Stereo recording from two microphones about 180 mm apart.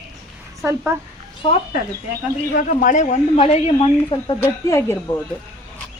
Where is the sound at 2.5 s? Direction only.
45° left (ahead or behind); by 4.3 s 25° left (ahead or behind).